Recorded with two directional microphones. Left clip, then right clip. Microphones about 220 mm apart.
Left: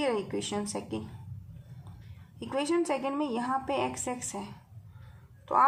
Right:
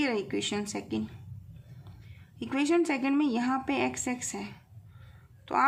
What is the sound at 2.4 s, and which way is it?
A woman's voice, 55° right (ahead or behind).